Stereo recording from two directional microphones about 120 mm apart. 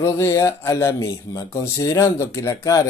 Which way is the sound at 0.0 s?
25° left (ahead or behind).